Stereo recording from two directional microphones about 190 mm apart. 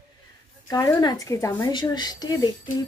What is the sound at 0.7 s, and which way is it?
A woman's voice, 20° left (ahead or behind).